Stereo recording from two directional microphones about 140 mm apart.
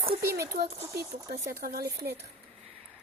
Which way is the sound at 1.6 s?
90° right.